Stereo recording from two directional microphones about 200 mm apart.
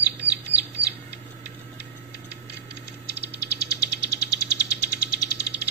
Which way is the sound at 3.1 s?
55° right (ahead or behind).